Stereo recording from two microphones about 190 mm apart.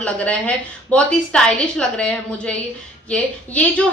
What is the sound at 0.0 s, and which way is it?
A woman's voice, 5° left (ahead or behind).